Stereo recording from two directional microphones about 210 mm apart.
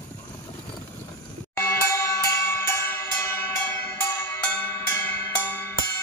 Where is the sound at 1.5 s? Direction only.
10° left (ahead or behind).